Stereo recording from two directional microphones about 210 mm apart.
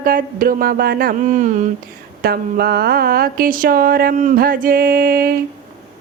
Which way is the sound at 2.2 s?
45° right (ahead or behind).